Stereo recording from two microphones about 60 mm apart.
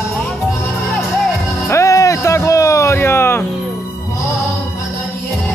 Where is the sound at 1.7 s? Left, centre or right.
Left.